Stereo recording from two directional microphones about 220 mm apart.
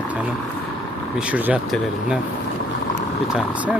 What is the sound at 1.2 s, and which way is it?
Speech, 5° right (ahead or behind).